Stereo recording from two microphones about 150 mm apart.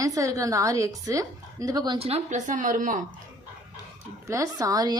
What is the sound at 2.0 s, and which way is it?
A woman's voice, 45° right (ahead or behind).